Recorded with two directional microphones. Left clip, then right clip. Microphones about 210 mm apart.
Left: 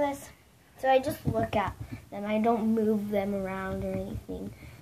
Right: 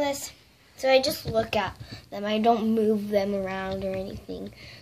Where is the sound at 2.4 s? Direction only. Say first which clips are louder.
Right 5 dB; 5° left (ahead or behind).